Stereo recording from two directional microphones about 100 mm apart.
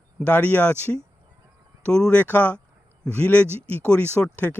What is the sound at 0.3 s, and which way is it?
Speech, 15° left (ahead or behind).